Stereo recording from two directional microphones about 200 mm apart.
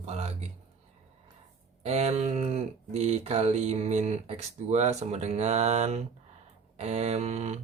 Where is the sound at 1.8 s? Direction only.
35° right (ahead or behind).